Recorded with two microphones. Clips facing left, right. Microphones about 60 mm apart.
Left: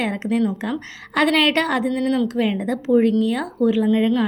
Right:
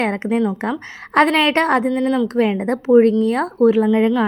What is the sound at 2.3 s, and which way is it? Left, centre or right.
Speech, right.